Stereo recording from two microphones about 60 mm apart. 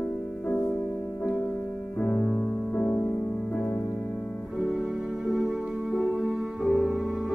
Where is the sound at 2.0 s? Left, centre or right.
Left.